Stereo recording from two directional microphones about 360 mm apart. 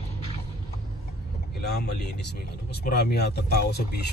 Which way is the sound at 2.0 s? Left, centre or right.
Left.